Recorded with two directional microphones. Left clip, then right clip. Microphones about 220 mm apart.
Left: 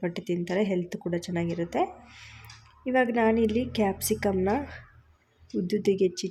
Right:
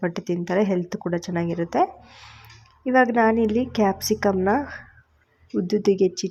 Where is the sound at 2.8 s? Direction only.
10° right (ahead or behind).